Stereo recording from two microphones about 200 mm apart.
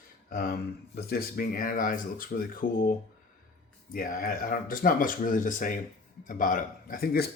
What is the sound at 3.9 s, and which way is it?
Speech, 45° left (ahead or behind).